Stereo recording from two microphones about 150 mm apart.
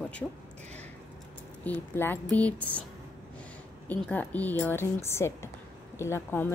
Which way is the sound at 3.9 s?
10° left (ahead or behind).